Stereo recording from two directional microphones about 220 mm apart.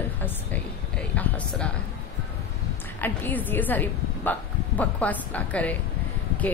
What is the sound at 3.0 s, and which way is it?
A woman's voice, 10° left (ahead or behind).